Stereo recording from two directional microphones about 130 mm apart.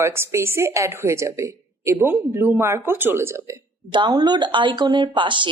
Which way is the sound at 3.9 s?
35° right (ahead or behind).